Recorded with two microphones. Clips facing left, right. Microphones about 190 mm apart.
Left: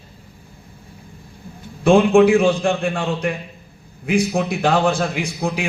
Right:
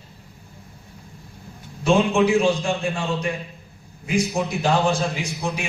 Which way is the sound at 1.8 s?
55° left (ahead or behind).